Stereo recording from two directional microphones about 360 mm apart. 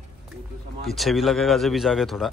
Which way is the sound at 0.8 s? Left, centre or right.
Centre.